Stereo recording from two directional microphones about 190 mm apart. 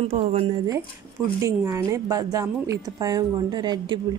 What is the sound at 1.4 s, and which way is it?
A woman's voice, 15° right (ahead or behind).